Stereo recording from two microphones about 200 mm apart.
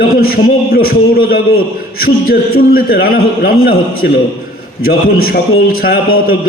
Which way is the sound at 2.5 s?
50° left (ahead or behind).